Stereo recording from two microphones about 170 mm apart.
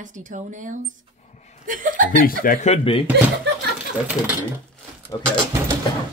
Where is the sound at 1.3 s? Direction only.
40° left (ahead or behind).